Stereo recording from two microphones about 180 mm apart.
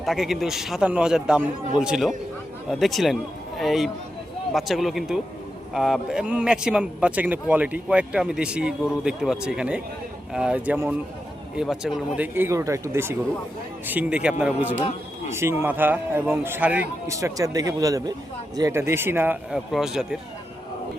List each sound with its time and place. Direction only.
0.0 s a man's voice: centre (ahead or behind)